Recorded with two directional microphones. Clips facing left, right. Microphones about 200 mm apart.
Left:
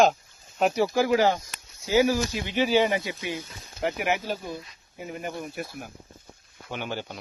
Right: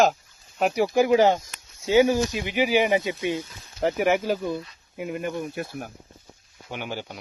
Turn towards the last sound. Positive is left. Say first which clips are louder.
# even
turn(degrees=-10)  # may be behind; listen again after turning